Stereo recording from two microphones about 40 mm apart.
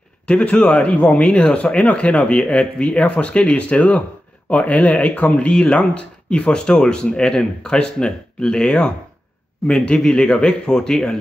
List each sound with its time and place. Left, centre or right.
0.3 s speech: left